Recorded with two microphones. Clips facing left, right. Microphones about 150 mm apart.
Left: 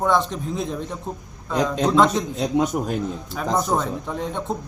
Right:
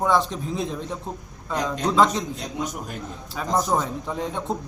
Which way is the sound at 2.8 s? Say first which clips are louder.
Left 9 dB; 65° left (ahead or behind).